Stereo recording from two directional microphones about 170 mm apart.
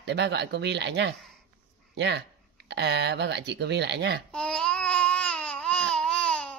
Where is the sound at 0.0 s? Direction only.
85° right.